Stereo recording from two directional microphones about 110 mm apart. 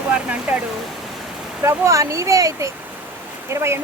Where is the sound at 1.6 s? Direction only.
25° right (ahead or behind).